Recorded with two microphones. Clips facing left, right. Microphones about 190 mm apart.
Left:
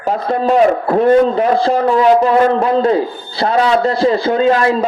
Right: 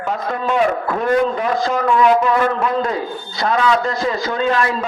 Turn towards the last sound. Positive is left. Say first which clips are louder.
# left 6 dB
turn(degrees=35)  # may be behind; listen again after turning